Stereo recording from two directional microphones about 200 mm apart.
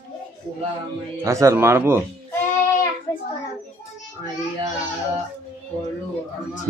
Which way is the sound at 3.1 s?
20° left (ahead or behind).